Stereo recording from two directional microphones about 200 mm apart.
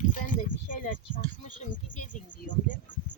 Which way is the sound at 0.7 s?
40° left (ahead or behind).